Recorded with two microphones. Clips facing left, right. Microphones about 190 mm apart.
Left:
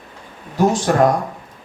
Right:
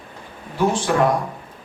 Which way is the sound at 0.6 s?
40° left (ahead or behind).